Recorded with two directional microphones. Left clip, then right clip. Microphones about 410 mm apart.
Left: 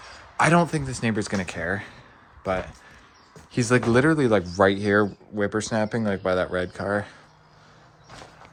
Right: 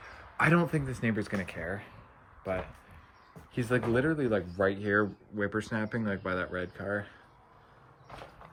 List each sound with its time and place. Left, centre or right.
0.3 s speech: centre
1.5 s speech: left
3.5 s speech: centre